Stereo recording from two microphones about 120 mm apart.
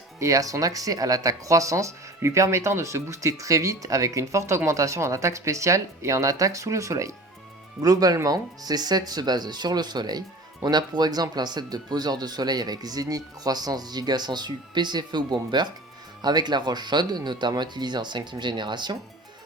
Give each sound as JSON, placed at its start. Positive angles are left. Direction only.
{"t": 0.2, "sound": "speech", "side_deg": -30}